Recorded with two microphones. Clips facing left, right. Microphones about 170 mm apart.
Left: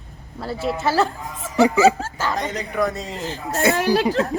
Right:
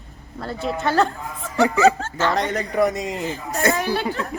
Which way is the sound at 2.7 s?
20° right (ahead or behind).